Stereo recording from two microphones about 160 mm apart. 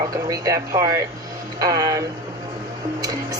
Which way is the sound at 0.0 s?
20° right (ahead or behind).